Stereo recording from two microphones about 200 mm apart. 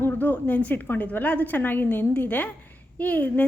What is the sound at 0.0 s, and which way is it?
A woman's voice, 10° left (ahead or behind).